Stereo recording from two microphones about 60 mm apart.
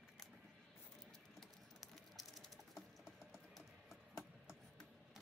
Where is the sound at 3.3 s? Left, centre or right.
Centre.